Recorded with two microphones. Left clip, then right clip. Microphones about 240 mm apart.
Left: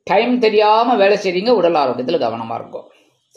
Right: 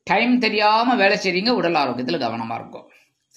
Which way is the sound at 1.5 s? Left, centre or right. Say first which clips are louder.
Left 8 dB; right.